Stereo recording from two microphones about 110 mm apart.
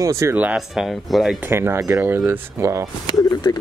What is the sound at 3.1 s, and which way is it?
Speech, 35° left (ahead or behind).